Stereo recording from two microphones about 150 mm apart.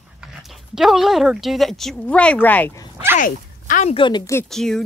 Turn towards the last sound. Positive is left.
turn(degrees=5)  # may be behind; listen again after turning